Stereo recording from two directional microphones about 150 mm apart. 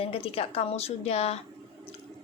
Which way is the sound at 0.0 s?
40° left (ahead or behind).